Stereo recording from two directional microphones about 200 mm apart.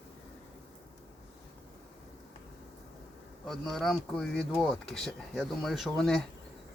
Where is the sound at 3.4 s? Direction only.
Centre (ahead or behind).